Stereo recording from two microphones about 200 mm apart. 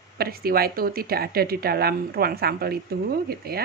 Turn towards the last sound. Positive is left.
turn(degrees=-50)  # may be behind; listen again after turning